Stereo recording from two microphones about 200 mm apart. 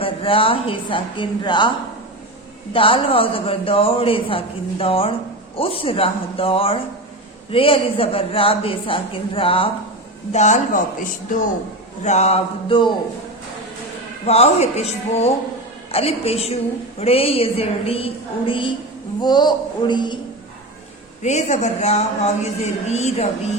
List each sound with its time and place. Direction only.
0.0 s a man's voice: 25° left (ahead or behind)
2.7 s a man's voice: 25° left (ahead or behind)
14.3 s a man's voice: 30° left (ahead or behind)
21.2 s a man's voice: 35° left (ahead or behind)